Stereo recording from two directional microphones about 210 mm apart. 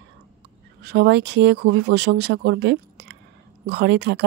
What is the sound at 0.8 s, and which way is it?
Speech, 55° right (ahead or behind).